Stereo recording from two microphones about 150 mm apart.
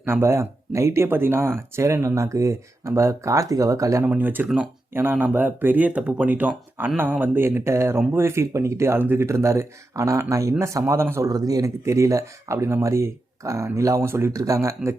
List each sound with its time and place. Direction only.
0.0 s speech: 15° right (ahead or behind)